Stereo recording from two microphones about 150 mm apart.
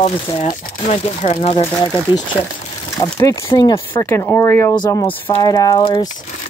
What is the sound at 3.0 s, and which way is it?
Speech, 25° left (ahead or behind).